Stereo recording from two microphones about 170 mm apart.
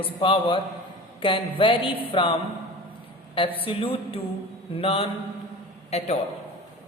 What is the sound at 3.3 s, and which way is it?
A man's voice, 30° left (ahead or behind).